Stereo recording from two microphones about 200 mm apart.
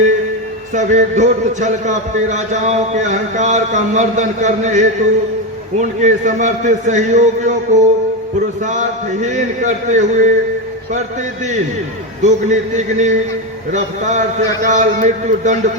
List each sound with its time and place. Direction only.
0.7 s a man's voice: 35° right (ahead or behind)
12.2 s a man's voice: 35° right (ahead or behind)